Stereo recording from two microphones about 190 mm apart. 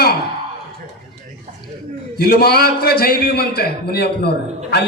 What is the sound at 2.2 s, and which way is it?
A man's voice, 55° left (ahead or behind).